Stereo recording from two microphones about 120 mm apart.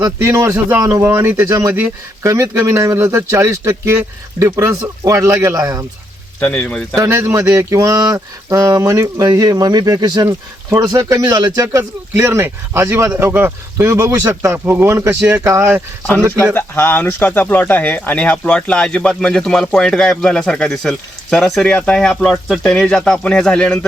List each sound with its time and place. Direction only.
0.0 s speech: 25° right (ahead or behind)
6.4 s speech: 10° left (ahead or behind)
6.9 s speech: 25° right (ahead or behind)
16.6 s speech: 15° left (ahead or behind)